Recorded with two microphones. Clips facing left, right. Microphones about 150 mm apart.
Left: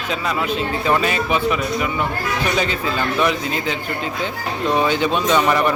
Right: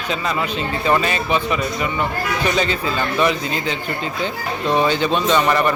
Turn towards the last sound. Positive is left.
turn(degrees=5)  # may be behind; listen again after turning